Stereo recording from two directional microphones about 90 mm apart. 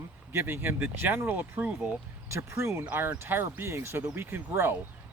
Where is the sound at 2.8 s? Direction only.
20° right (ahead or behind).